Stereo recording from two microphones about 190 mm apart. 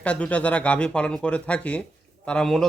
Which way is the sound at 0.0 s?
5° left (ahead or behind).